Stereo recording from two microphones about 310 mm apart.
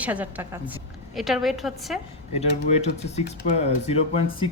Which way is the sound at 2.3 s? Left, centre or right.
Centre.